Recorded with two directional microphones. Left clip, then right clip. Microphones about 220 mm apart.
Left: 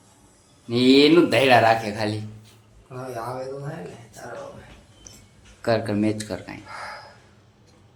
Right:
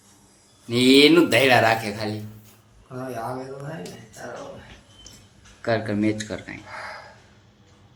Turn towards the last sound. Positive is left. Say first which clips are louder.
# right 1 dB
turn(degrees=5)  # may be behind; listen again after turning